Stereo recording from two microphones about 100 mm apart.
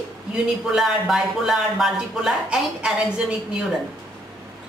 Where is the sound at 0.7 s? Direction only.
5° right (ahead or behind).